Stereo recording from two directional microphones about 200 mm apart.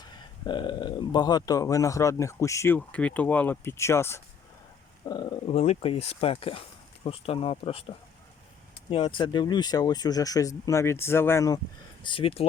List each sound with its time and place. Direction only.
0.0 s speech: 25° left (ahead or behind)
12.0 s speech: 25° left (ahead or behind)